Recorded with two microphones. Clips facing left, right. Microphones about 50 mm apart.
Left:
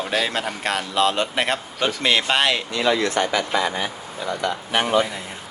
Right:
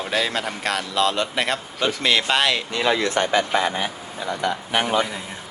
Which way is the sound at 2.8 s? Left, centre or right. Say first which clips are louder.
Even; right.